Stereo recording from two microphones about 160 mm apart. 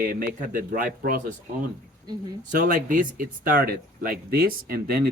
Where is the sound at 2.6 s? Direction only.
55° right (ahead or behind).